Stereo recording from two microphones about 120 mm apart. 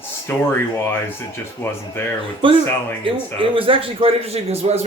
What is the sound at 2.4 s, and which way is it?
A man's voice, 45° right (ahead or behind).